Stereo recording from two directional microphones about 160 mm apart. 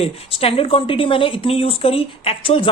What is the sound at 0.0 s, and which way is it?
A woman's voice, 35° left (ahead or behind).